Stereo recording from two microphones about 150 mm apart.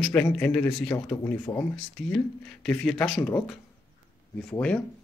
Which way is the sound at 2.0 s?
5° left (ahead or behind).